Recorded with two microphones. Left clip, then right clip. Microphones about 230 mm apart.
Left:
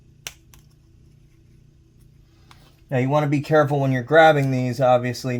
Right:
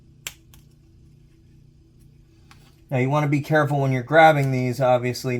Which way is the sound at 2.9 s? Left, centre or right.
Left.